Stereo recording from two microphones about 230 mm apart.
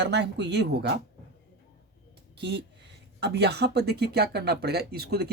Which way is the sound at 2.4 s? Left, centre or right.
Right.